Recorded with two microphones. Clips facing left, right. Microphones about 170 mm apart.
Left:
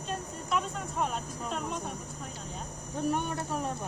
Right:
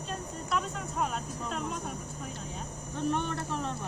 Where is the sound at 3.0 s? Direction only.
10° left (ahead or behind).